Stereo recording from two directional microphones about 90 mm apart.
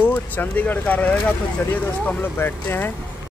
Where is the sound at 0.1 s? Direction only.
20° left (ahead or behind).